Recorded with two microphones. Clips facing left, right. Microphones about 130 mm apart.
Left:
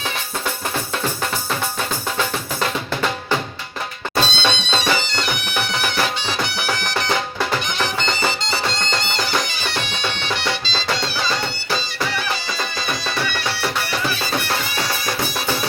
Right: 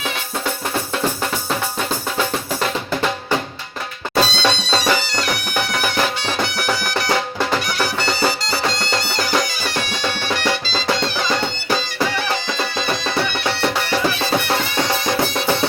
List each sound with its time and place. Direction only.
4.1 s music: 10° right (ahead or behind)
9.7 s bagpipes: 10° right (ahead or behind)
10.7 s music: 15° right (ahead or behind)